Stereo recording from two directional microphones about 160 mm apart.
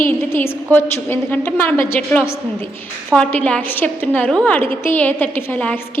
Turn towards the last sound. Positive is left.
turn(degrees=10)  # may be behind; listen again after turning